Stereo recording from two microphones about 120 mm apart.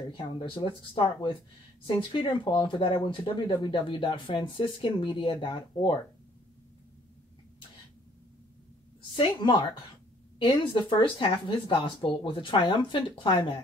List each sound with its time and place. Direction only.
0.2 s speech: 40° left (ahead or behind)
9.1 s speech: 45° left (ahead or behind)